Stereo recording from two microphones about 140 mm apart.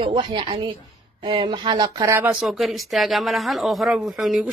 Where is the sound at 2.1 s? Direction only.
10° right (ahead or behind).